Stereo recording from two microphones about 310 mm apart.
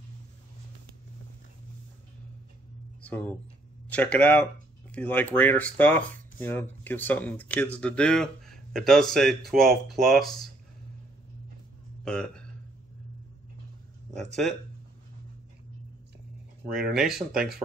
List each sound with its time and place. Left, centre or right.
3.0 s speech: centre
12.0 s speech: centre
14.1 s speech: centre
16.9 s speech: centre